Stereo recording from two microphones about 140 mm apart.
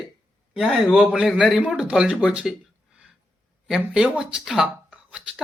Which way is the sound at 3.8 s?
10° right (ahead or behind).